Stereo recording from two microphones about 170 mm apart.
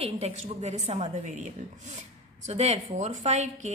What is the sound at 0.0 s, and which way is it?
A woman's voice, 40° right (ahead or behind).